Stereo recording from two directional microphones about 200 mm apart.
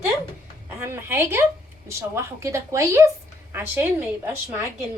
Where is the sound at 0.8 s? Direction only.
10° right (ahead or behind).